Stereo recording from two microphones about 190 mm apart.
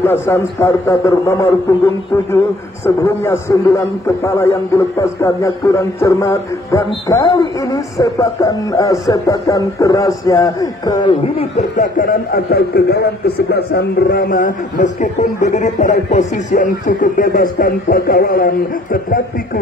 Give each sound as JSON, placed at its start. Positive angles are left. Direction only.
{"t": 0.0, "sound": "a man's voice", "side_deg": 15}
{"t": 2.8, "sound": "a man's voice", "side_deg": 15}
{"t": 11.8, "sound": "speech", "side_deg": 50}